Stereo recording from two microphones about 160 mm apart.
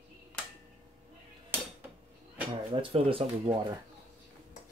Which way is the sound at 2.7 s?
35° right (ahead or behind).